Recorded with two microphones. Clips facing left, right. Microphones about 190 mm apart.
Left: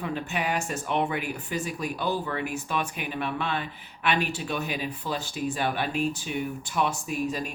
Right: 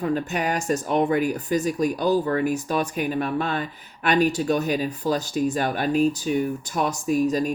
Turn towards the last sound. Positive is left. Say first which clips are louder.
# right 9 dB
turn(degrees=-40)  # may be behind; listen again after turning